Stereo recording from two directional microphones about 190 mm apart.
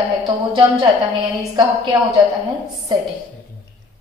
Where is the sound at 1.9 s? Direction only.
20° right (ahead or behind).